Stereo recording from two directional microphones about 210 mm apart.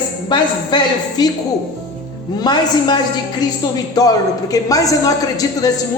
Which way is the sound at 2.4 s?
20° left (ahead or behind).